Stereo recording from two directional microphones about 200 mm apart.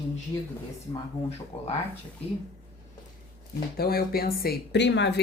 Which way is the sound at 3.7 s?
50° left (ahead or behind).